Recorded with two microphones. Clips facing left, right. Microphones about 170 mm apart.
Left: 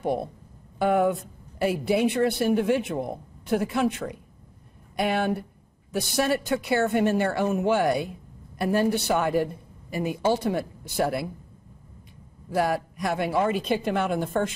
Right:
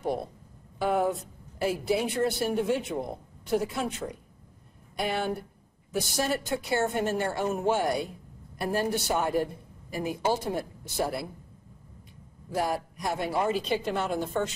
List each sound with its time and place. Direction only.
0.0 s speech: 60° left (ahead or behind)
12.5 s speech: 65° left (ahead or behind)